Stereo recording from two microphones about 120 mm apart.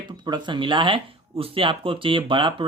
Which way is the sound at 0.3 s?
40° right (ahead or behind).